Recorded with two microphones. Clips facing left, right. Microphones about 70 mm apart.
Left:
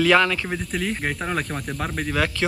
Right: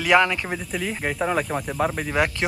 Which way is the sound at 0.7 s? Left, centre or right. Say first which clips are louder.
Even; centre.